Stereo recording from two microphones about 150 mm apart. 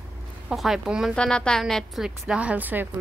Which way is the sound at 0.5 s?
Centre (ahead or behind).